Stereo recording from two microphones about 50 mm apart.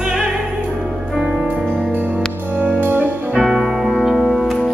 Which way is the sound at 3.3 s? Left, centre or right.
Centre.